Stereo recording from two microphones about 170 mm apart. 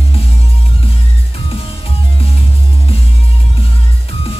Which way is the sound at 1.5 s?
35° left (ahead or behind).